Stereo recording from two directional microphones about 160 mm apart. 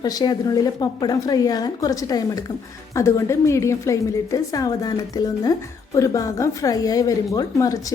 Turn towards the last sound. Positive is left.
turn(degrees=20)  # may be behind; listen again after turning